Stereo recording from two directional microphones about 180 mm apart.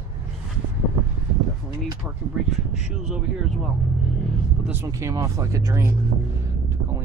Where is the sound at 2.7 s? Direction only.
5° right (ahead or behind).